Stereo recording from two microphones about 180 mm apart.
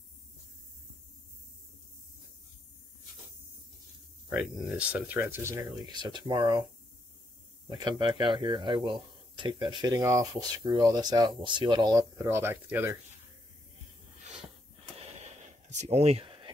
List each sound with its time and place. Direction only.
4.3 s speech: 5° right (ahead or behind); by 6.6 s 25° right (ahead or behind)
7.7 s speech: 25° right (ahead or behind)
15.0 s a sound: 35° right (ahead or behind)